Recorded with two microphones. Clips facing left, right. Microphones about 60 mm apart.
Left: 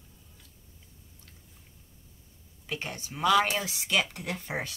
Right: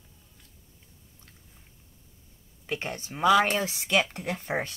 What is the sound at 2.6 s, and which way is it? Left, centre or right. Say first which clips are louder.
Speech: right 3 dB; right.